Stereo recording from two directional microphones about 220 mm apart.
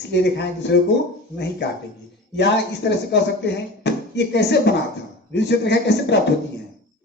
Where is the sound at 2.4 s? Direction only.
50° left (ahead or behind).